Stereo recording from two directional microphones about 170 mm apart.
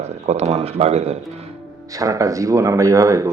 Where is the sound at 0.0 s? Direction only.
40° right (ahead or behind).